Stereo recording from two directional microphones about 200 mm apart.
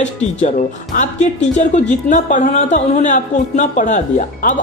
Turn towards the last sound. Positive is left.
turn(degrees=40)  # may be behind; listen again after turning